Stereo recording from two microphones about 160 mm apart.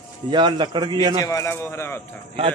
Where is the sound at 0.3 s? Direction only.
30° right (ahead or behind).